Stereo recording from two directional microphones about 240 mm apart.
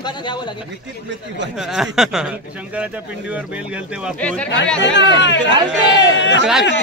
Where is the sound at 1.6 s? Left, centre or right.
Centre.